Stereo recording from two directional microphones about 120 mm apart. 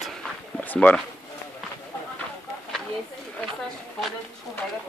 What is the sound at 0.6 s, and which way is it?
Speech, 15° left (ahead or behind).